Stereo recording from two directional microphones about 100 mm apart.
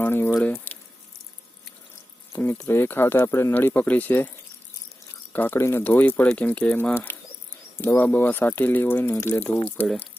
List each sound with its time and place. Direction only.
0.0 s speech: 20° left (ahead or behind)
0.4 s squish: 15° left (ahead or behind)
2.3 s speech: 20° left (ahead or behind)
5.3 s speech: 20° left (ahead or behind)